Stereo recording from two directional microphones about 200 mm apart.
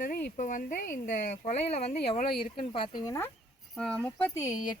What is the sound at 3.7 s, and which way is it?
Speech, 5° left (ahead or behind).